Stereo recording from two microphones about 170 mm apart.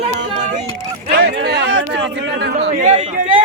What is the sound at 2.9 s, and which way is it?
Speech, 45° right (ahead or behind).